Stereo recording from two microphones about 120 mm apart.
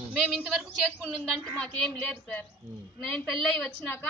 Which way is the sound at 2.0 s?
15° left (ahead or behind).